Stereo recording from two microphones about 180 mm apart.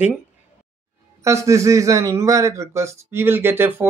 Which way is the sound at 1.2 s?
15° right (ahead or behind).